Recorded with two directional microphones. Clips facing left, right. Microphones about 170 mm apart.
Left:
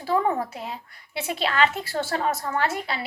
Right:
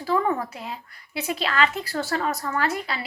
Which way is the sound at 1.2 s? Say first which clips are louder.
Left 1 dB; 25° left (ahead or behind).